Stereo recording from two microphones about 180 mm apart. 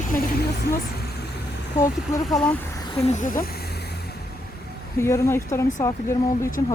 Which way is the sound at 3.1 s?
50° left (ahead or behind).